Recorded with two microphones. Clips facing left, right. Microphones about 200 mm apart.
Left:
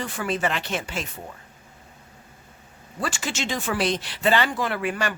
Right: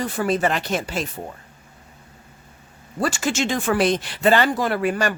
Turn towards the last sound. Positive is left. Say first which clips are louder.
# right 5 dB
turn(degrees=-40)  # may be behind; listen again after turning